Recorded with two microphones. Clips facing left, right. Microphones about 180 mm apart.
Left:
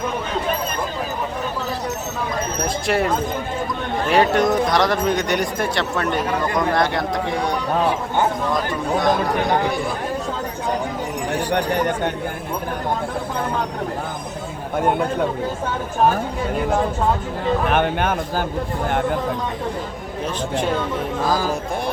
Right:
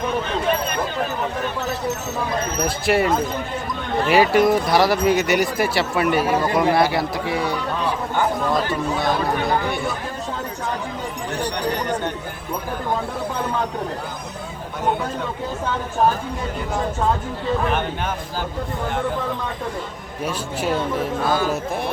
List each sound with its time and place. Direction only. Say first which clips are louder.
2.6 s speech: right 2 dB; centre (ahead or behind)
8.5 s speech: even; 5° right (ahead or behind)
11.5 s speech: left 6 dB; 55° left (ahead or behind)
17.7 s speech: left 4 dB; 60° left (ahead or behind)
20.2 s speech: left 1 dB; 5° right (ahead or behind)